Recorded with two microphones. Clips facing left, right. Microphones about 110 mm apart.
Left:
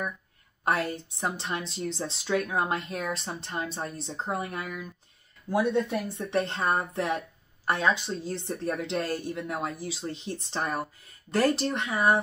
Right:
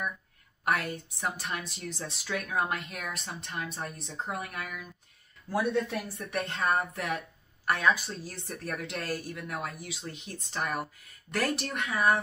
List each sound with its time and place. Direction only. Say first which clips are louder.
0.7 s speech: left 3 dB; 30° left (ahead or behind)